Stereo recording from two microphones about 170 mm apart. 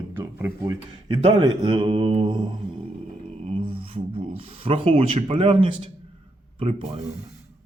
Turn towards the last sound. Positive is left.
turn(degrees=-35)  # may be behind; listen again after turning